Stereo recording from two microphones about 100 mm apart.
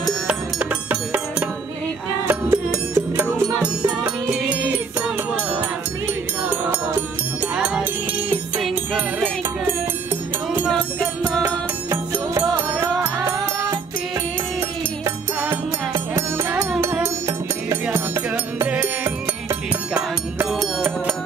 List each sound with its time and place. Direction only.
0.3 s music: 15° right (ahead or behind)
2.2 s music: 25° right (ahead or behind)
3.6 s music: 10° right (ahead or behind)
6.5 s music: 20° right (ahead or behind)
7.5 s music: 5° right (ahead or behind)
11.9 s music: 35° right (ahead or behind)
12.5 s music: 20° right (ahead or behind)
15.0 s music: 30° right (ahead or behind)
18.7 s music: 15° right (ahead or behind)